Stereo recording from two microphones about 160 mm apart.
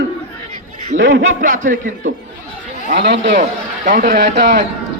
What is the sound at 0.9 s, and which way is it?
Speech, 50° right (ahead or behind).